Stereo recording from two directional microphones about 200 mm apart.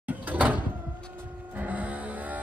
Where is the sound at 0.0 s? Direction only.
10° right (ahead or behind).